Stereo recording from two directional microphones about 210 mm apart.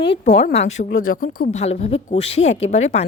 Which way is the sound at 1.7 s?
30° left (ahead or behind).